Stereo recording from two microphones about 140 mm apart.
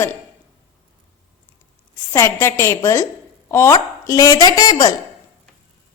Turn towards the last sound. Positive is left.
turn(degrees=30)  # may be behind; listen again after turning